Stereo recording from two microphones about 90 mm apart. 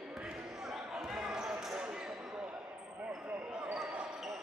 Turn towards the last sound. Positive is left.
turn(degrees=-5)  # may be behind; listen again after turning